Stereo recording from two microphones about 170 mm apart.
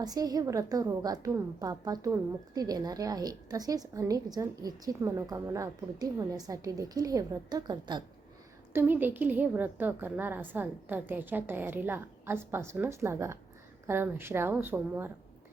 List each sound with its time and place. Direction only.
0.0 s a woman's voice: 20° right (ahead or behind)
8.7 s a woman's voice: 10° right (ahead or behind)